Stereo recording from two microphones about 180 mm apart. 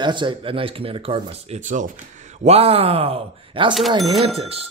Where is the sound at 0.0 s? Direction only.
25° right (ahead or behind).